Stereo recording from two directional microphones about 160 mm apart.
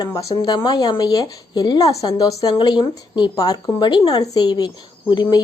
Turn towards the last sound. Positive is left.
turn(degrees=25)  # may be behind; listen again after turning